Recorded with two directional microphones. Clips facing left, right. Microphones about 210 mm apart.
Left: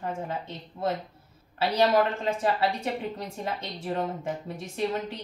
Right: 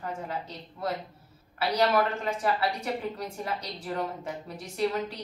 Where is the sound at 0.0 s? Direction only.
25° left (ahead or behind).